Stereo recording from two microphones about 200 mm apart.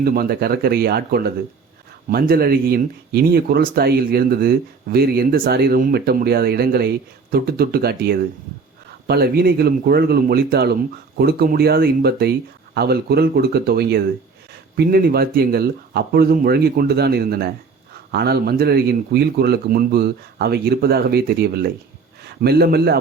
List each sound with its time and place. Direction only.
0.0 s a man's voice: 50° right (ahead or behind)